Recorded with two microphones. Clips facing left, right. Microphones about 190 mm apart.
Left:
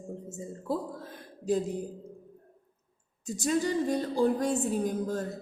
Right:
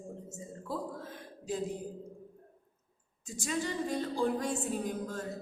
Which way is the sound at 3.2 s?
40° left (ahead or behind).